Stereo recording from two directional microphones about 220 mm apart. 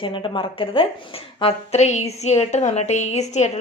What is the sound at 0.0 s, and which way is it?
A woman's voice, 20° left (ahead or behind).